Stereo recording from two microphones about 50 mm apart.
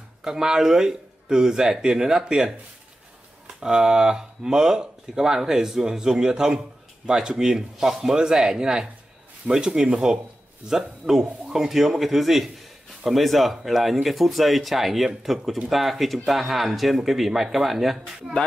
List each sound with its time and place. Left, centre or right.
0.2 s speech: centre
3.6 s speech: centre
9.5 s speech: right
9.8 s speech: centre